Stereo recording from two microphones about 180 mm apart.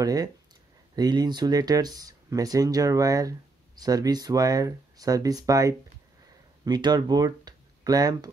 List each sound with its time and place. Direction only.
0.0 s speech: 20° right (ahead or behind)